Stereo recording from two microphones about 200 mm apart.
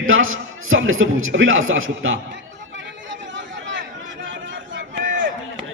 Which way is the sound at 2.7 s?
65° right (ahead or behind).